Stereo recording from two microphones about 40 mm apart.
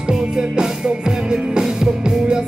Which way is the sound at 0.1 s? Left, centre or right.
Centre.